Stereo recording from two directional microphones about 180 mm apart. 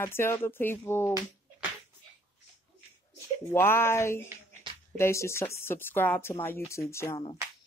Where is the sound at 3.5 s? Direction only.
15° left (ahead or behind).